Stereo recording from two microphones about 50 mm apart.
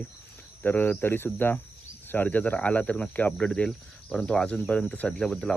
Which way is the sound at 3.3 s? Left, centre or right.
Centre.